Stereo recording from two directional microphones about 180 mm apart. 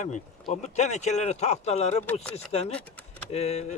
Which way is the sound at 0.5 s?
40° left (ahead or behind).